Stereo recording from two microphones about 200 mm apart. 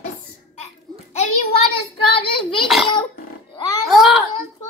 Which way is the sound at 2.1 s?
25° left (ahead or behind).